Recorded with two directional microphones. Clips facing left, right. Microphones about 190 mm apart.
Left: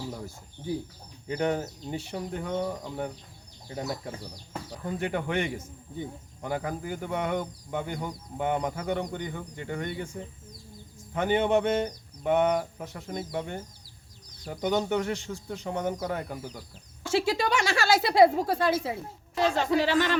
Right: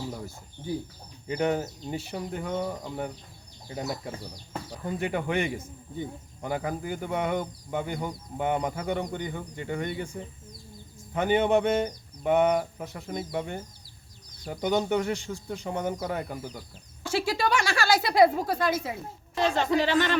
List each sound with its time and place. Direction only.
1.3 s speech: 10° right (ahead or behind)
11.1 s speech: 15° right (ahead or behind)
17.0 s speech: 25° left (ahead or behind)
19.5 s speech: 5° left (ahead or behind)